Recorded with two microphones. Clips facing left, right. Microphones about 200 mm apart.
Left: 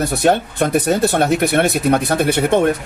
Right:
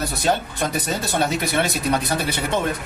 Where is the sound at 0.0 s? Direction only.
55° left (ahead or behind).